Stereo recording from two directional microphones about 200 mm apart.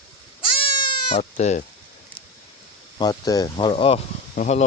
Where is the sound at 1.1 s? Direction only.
35° left (ahead or behind).